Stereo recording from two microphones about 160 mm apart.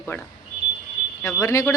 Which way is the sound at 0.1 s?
15° left (ahead or behind).